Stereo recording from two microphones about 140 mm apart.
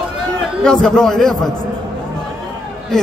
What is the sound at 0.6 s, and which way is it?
Speech, 5° left (ahead or behind).